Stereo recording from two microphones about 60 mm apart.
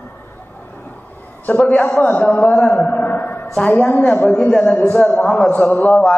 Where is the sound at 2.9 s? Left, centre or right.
Left.